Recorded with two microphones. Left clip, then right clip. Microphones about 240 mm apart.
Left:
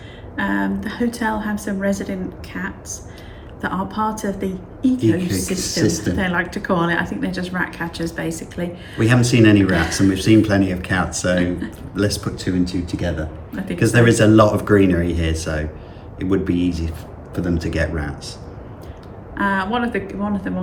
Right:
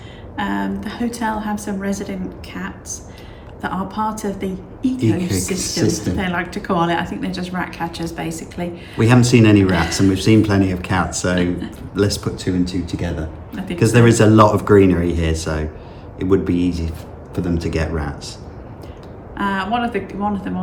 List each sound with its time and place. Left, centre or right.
0.3 s a woman's voice: centre
5.5 s speech: centre
6.1 s a woman's voice: centre
9.0 s speech: centre
19.4 s speech: centre